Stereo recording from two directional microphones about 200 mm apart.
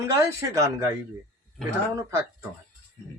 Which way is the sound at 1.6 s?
Centre (ahead or behind).